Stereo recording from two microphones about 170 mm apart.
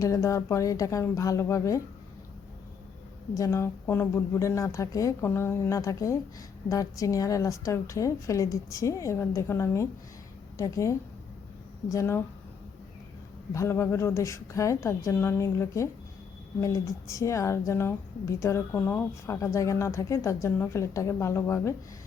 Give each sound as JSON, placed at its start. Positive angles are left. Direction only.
{"t": 0.0, "sound": "a woman's voice", "side_deg": 15}
{"t": 3.3, "sound": "a woman's voice", "side_deg": 15}
{"t": 13.5, "sound": "a woman's voice", "side_deg": 15}